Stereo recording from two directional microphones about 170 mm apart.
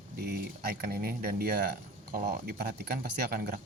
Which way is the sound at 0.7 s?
60° right (ahead or behind).